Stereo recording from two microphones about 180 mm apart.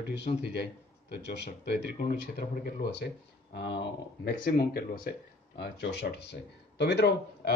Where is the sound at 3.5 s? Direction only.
75° left (ahead or behind).